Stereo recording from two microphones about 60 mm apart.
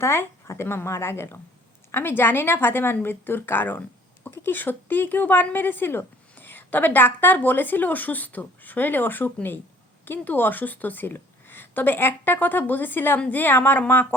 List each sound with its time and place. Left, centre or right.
0.0 s a woman's voice: left